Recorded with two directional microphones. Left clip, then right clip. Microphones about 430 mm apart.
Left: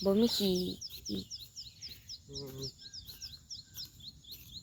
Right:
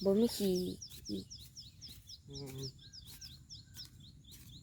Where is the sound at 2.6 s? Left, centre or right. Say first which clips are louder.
Left 4 dB; right.